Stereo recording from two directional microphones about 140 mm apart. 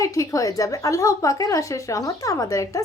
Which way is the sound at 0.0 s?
25° left (ahead or behind).